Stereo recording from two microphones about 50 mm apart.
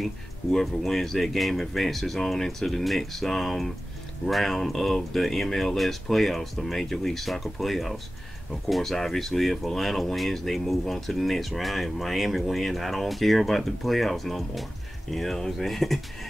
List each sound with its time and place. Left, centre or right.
0.0 s speech: centre